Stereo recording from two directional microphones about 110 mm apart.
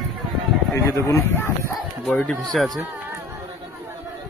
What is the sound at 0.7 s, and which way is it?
Speech, 25° left (ahead or behind).